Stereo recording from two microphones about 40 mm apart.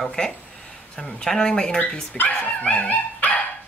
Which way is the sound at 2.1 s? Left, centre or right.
Left.